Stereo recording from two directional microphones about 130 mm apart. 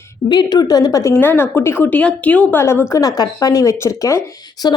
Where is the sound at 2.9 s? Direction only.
30° left (ahead or behind).